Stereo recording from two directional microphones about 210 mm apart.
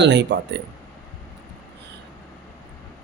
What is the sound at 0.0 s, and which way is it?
Speech, 55° right (ahead or behind).